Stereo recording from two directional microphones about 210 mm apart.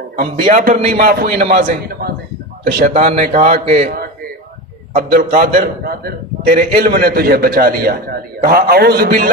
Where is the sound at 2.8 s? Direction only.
35° right (ahead or behind).